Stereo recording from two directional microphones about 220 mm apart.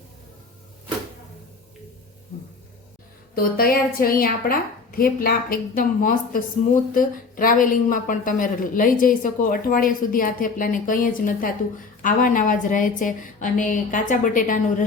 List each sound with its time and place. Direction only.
3.3 s a woman's voice: 45° left (ahead or behind)